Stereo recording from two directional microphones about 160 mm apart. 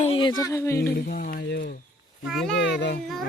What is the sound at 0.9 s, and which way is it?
Speech, 70° left (ahead or behind).